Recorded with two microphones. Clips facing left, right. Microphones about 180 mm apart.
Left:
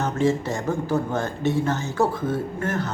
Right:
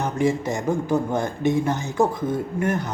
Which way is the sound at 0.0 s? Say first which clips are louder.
Even; 15° right (ahead or behind).